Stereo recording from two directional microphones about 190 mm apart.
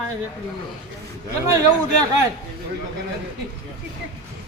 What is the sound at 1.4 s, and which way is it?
Speech, 15° right (ahead or behind).